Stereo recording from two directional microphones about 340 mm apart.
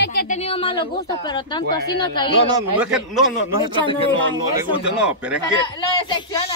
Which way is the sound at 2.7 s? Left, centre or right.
Centre.